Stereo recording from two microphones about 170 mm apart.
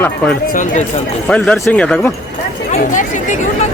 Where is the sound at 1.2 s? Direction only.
5° left (ahead or behind).